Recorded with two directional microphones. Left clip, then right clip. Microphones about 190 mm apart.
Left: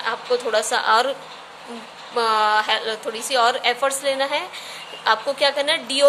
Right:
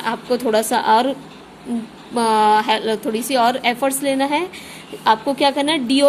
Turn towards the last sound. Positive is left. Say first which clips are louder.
# right 3 dB
turn(degrees=-25)  # may be behind; listen again after turning